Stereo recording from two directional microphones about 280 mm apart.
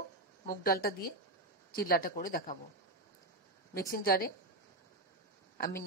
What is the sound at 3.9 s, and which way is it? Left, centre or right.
Speech, left.